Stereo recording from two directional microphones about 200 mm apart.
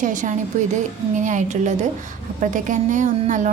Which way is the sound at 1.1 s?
40° right (ahead or behind).